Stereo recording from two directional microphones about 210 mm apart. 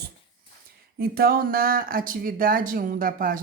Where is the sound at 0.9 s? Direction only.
45° right (ahead or behind).